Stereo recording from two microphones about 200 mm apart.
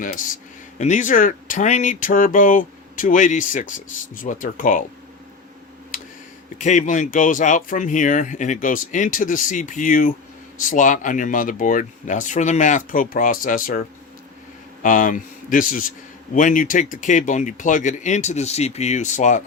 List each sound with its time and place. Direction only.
0.0 s speech: 40° left (ahead or behind)
5.9 s a sound: 45° left (ahead or behind)
6.6 s speech: 40° left (ahead or behind)